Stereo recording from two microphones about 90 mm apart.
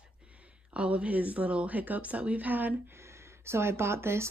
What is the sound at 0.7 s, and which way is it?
Speech, 15° right (ahead or behind).